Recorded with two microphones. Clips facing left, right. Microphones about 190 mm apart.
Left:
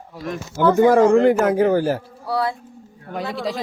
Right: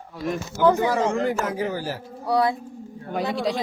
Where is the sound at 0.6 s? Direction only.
50° left (ahead or behind).